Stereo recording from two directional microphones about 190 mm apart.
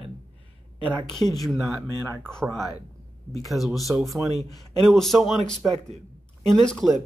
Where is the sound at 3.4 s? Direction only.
Centre (ahead or behind).